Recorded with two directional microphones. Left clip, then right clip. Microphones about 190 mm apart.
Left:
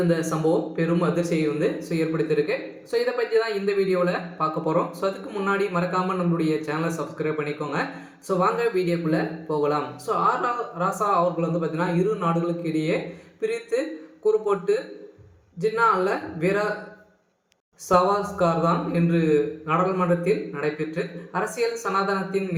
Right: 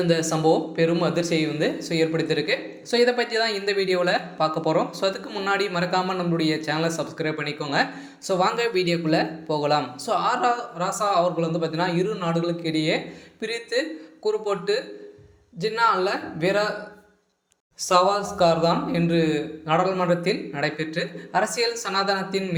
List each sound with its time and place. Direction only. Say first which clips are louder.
0.1 s speech: right 2 dB; 30° right (ahead or behind)
17.8 s speech: right 1 dB; 30° right (ahead or behind)